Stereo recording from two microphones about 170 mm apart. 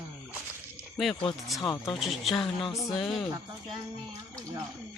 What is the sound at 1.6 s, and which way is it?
Speech, 20° left (ahead or behind).